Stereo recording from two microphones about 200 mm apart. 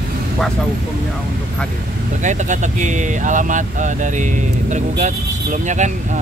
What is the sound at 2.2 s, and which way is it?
Speech, 35° right (ahead or behind).